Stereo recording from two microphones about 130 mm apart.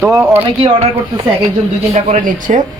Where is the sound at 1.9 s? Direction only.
80° right.